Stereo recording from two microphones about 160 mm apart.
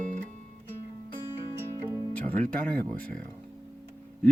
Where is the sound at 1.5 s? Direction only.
15° right (ahead or behind).